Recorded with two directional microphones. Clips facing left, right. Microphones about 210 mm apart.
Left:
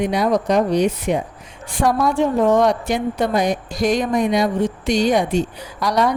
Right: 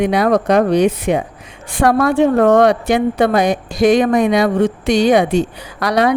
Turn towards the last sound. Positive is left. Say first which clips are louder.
# right 4 dB
turn(degrees=-65)  # may be behind; listen again after turning